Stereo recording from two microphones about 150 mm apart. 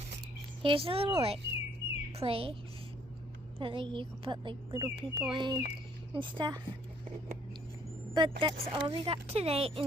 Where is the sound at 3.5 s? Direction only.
35° right (ahead or behind).